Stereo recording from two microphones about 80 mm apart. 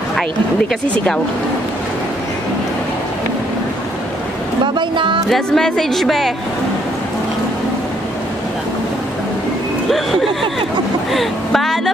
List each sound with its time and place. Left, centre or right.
0.8 s speech: centre
4.7 s speech: right
5.3 s a woman's voice: centre
9.8 s a woman's voice: centre